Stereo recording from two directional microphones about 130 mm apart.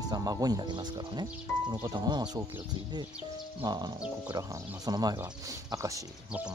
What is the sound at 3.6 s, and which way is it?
Speech, 30° right (ahead or behind).